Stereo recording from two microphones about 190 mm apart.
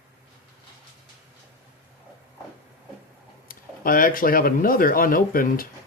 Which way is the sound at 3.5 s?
50° left (ahead or behind).